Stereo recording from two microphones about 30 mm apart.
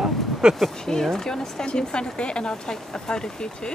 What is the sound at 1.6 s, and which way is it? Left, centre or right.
A woman's voice, left.